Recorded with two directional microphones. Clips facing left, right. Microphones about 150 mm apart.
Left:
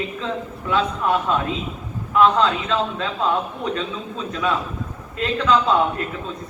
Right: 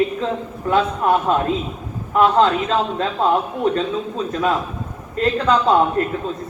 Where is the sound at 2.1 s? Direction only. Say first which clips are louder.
Right 2 dB; 35° right (ahead or behind).